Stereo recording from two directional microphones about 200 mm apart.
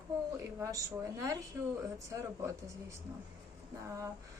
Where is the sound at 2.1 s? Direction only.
15° right (ahead or behind).